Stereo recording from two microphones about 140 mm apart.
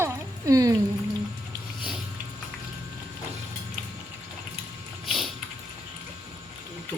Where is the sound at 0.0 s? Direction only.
25° right (ahead or behind).